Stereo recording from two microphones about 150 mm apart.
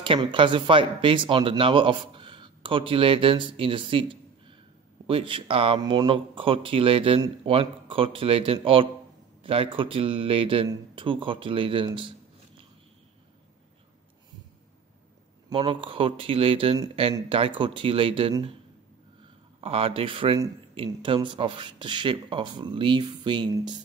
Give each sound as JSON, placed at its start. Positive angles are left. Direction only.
{"t": 0.0, "sound": "speech", "side_deg": -35}
{"t": 15.5, "sound": "speech", "side_deg": -35}
{"t": 19.6, "sound": "speech", "side_deg": -40}